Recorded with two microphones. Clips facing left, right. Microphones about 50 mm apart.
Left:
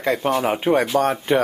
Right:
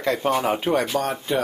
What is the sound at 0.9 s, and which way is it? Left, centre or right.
Speech, left.